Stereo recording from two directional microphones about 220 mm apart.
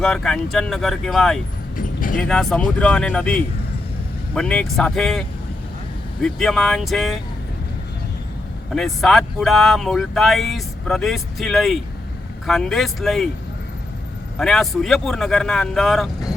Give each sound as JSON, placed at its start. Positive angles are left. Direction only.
{"t": 0.0, "sound": "speech", "side_deg": 5}
{"t": 1.7, "sound": "vehicle", "side_deg": 40}
{"t": 2.2, "sound": "speech", "side_deg": 0}
{"t": 6.2, "sound": "speech", "side_deg": 0}
{"t": 8.7, "sound": "speech", "side_deg": 0}
{"t": 14.3, "sound": "speech", "side_deg": 0}